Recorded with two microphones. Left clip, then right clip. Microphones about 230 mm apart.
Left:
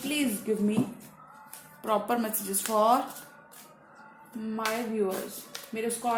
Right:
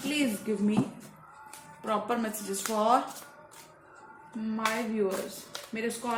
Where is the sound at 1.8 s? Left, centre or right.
Left.